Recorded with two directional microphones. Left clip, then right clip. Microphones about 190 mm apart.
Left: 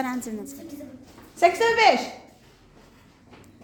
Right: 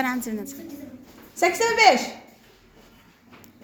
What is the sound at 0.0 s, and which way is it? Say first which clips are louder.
Speech: right 3 dB; 10° left (ahead or behind).